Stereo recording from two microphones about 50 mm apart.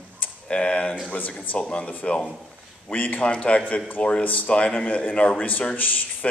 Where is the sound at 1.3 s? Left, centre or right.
Left.